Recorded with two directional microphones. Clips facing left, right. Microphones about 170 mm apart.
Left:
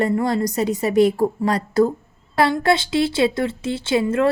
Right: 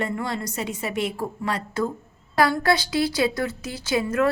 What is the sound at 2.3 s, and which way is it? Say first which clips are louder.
A woman's voice: left 3 dB; 25° left (ahead or behind).